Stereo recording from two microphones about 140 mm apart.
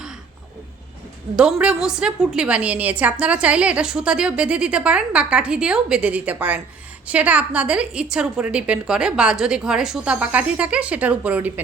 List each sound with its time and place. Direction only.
1.6 s a woman's voice: 5° right (ahead or behind)